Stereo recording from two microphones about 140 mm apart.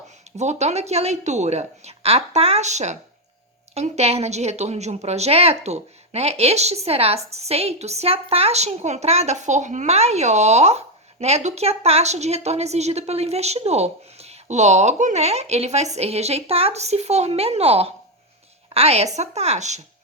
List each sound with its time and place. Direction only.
0.3 s a woman's voice: 55° right (ahead or behind)